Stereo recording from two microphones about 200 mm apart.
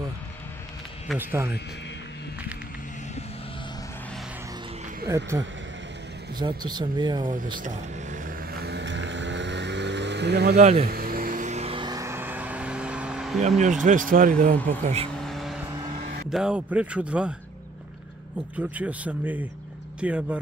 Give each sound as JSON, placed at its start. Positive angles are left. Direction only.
{"t": 1.0, "sound": "speech", "side_deg": -10}
{"t": 5.0, "sound": "speech", "side_deg": -15}
{"t": 8.6, "sound": "vehicle", "side_deg": -60}
{"t": 13.8, "sound": "speech", "side_deg": -40}
{"t": 15.1, "sound": "vehicle", "side_deg": 0}
{"t": 15.7, "sound": "vehicle", "side_deg": -25}
{"t": 16.3, "sound": "a man's voice", "side_deg": -5}
{"t": 18.6, "sound": "a man's voice", "side_deg": -5}